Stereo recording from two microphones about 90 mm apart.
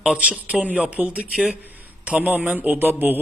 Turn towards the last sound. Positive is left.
turn(degrees=-20)  # may be behind; listen again after turning